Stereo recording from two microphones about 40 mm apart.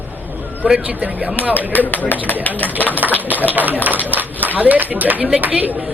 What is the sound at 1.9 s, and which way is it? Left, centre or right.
Speech, left.